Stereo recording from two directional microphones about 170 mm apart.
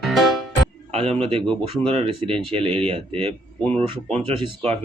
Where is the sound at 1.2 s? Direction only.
35° right (ahead or behind).